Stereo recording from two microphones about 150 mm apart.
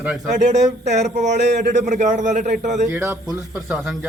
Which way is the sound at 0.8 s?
50° right (ahead or behind).